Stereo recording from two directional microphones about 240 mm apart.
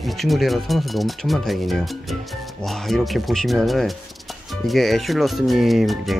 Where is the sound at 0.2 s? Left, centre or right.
Centre.